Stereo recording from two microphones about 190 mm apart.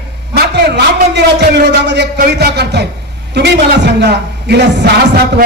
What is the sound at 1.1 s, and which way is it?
A man's voice, 65° right (ahead or behind).